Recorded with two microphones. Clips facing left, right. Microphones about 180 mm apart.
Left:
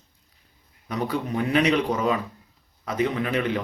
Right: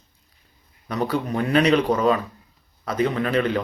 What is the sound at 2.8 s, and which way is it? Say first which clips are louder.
Speech: right 2 dB; 20° left (ahead or behind).